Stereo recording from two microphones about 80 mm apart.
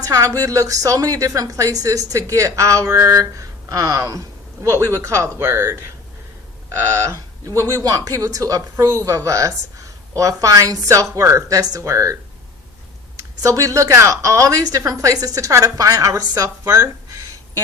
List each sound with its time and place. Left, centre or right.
0.0 s a woman's voice: right
13.1 s a woman's voice: right